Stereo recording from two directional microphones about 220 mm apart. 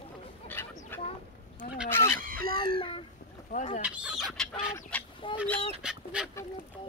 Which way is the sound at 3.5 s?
35° left (ahead or behind).